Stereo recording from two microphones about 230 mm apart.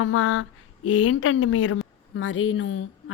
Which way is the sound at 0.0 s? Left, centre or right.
Left.